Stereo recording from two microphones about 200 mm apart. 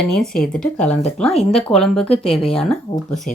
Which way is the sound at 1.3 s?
30° left (ahead or behind).